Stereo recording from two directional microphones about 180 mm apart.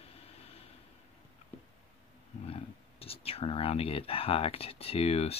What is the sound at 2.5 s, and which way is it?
Speech, 30° left (ahead or behind).